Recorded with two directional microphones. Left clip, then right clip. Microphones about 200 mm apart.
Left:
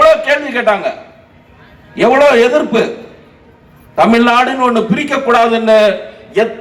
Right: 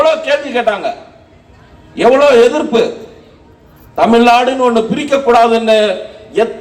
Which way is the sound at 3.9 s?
25° left (ahead or behind).